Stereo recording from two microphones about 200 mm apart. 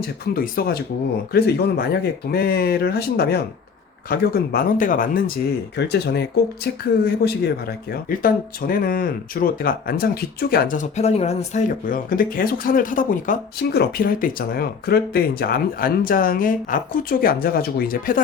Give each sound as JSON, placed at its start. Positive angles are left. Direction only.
{"t": 0.3, "sound": "speech", "side_deg": 45}
{"t": 5.7, "sound": "speech", "side_deg": 60}
{"t": 11.9, "sound": "speech", "side_deg": 45}